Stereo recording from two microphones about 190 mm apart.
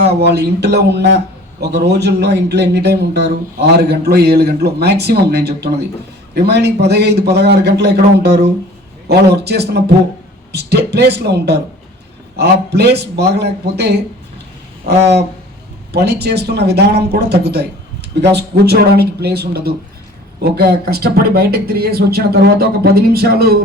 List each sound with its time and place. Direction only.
0.0 s speech: 60° right (ahead or behind)
15.9 s speech: 60° right (ahead or behind)